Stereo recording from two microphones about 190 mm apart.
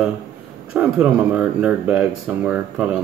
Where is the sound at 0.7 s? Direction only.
5° right (ahead or behind).